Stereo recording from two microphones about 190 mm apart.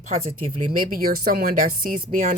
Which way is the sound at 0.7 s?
50° right (ahead or behind).